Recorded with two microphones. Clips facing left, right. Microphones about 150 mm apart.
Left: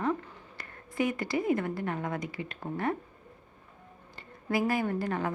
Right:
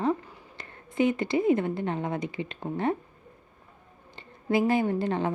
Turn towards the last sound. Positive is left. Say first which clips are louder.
# right 4 dB
turn(degrees=-25)  # may be behind; listen again after turning